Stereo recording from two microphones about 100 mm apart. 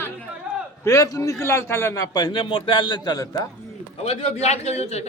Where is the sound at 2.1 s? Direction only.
45° left (ahead or behind).